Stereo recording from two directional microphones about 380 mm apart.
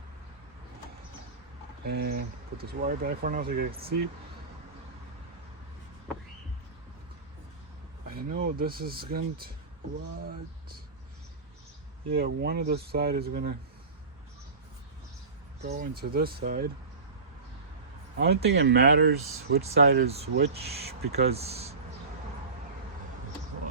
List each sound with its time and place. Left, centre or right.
1.8 s speech: right
8.0 s speech: right
12.1 s speech: right
15.6 s speech: right
18.3 s speech: right